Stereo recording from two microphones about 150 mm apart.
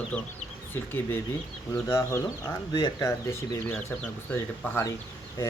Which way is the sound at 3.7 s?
10° left (ahead or behind).